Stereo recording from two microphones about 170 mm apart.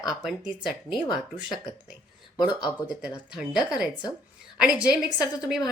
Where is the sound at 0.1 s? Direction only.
5° right (ahead or behind).